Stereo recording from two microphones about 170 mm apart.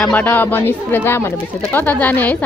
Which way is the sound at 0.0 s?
10° left (ahead or behind).